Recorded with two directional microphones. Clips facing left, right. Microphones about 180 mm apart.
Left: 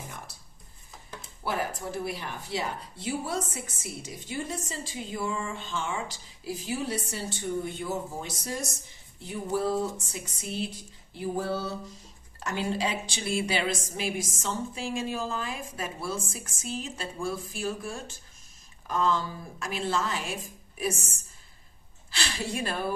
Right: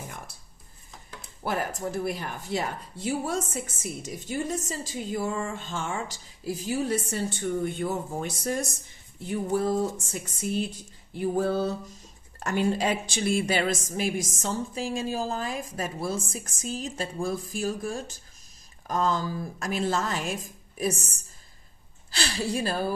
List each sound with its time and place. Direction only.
1.4 s speech: 45° right (ahead or behind)